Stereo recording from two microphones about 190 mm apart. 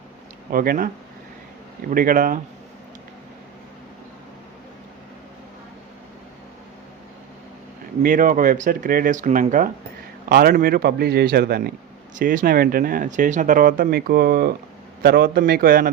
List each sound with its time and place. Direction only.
0.5 s speech: 50° right (ahead or behind)
1.9 s speech: 45° right (ahead or behind)
8.0 s speech: 45° right (ahead or behind)
12.2 s speech: 45° right (ahead or behind)